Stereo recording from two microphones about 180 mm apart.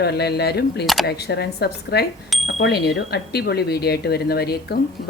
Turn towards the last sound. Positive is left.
turn(degrees=60)  # may be behind; listen again after turning